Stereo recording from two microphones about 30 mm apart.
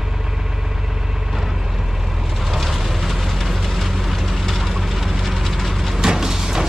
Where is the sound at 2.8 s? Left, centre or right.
Centre.